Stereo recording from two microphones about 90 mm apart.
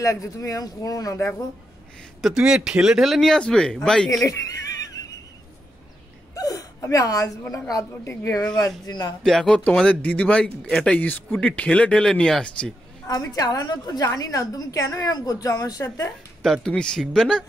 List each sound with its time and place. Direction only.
0.0 s a woman's voice: 35° left (ahead or behind)
2.2 s speech: 5° right (ahead or behind)
4.1 s a sound: 40° left (ahead or behind)
6.3 s gasp: 40° left (ahead or behind)
7.7 s a woman's voice: 30° left (ahead or behind)
8.5 s speech: 45° left (ahead or behind)
9.2 s speech: 5° left (ahead or behind)
9.8 s speech: 15° left (ahead or behind)
13.0 s a woman's voice: 40° left (ahead or behind)
16.4 s speech: 5° left (ahead or behind)